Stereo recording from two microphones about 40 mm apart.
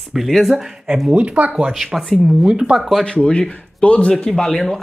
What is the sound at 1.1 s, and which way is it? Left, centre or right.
Speech, right.